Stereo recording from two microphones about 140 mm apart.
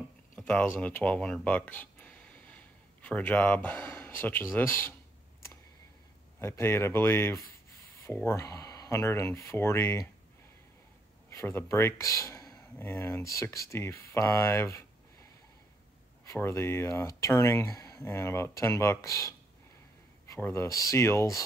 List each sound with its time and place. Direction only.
0.4 s speech: 10° left (ahead or behind)
6.4 s speech: 20° left (ahead or behind)
11.2 s speech: 20° left (ahead or behind)
16.3 s speech: 20° left (ahead or behind)
20.3 s speech: 20° left (ahead or behind)